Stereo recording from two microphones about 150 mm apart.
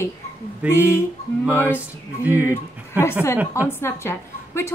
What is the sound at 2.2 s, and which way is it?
Speech, 15° right (ahead or behind).